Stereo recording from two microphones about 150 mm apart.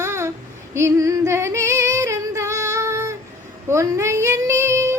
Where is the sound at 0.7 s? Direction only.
15° right (ahead or behind).